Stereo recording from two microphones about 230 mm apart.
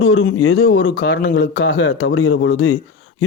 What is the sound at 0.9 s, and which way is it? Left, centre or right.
Speech, left.